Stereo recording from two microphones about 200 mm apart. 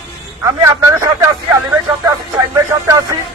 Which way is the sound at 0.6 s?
15° right (ahead or behind).